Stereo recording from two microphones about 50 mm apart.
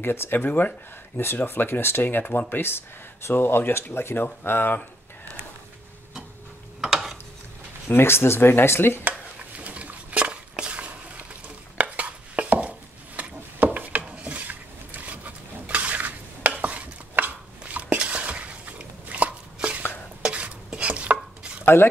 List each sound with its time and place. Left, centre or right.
0.0 s speech: left
0.4 s speech: left
1.1 s speech: left
6.8 s mechanisms: centre
7.9 s speech: left
9.6 s dishes: right
11.8 s chopping: right
13.6 s wood: right
17.7 s a sound: right
20.2 s chopping: right